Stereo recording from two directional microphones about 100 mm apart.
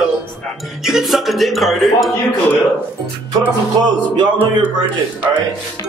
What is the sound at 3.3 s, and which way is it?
Music, 40° right (ahead or behind).